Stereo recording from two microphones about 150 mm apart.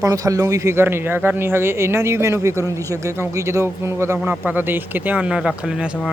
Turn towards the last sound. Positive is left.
turn(degrees=-5)  # may be behind; listen again after turning